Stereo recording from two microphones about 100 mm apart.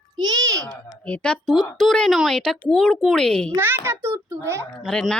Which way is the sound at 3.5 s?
25° right (ahead or behind).